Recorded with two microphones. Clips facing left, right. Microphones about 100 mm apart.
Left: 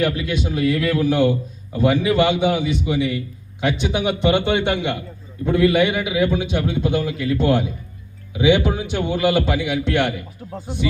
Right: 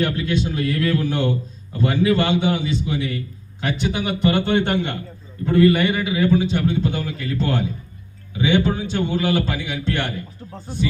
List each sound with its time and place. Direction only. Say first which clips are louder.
0.0 s a man's voice: even; 10° left (ahead or behind)